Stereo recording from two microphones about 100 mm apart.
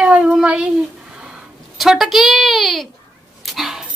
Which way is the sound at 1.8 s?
Centre (ahead or behind).